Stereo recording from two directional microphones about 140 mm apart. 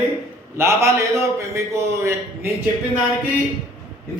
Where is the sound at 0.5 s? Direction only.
20° right (ahead or behind).